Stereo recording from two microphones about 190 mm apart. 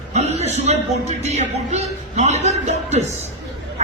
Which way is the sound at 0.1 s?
35° right (ahead or behind).